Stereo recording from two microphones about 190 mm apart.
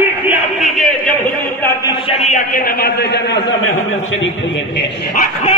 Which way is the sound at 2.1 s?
40° left (ahead or behind).